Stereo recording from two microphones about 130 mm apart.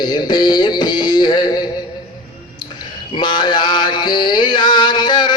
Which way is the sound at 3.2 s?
35° left (ahead or behind).